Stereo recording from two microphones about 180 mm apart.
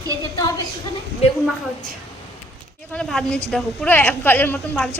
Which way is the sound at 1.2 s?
35° left (ahead or behind).